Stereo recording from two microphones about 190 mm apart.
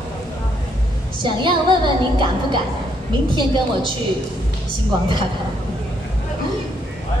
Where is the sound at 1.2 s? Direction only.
25° right (ahead or behind).